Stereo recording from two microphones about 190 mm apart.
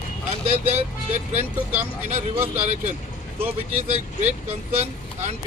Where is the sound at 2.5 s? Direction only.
35° right (ahead or behind).